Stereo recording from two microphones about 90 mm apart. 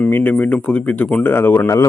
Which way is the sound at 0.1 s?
20° left (ahead or behind).